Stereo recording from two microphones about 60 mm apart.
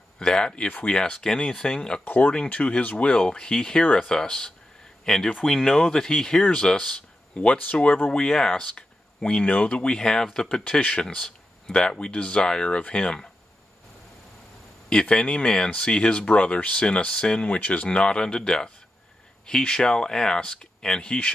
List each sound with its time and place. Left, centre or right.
0.2 s speech: centre
2.0 s speech: left; by 7.0 s centre
7.3 s speech: left
14.9 s speech: centre